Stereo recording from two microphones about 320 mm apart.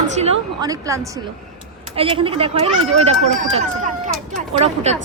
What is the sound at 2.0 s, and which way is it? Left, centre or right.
Speech, centre.